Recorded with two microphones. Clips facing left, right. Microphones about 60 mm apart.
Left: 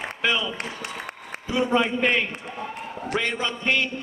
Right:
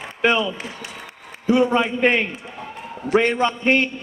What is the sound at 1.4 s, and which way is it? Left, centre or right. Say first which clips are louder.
A man's voice: right 5 dB; right.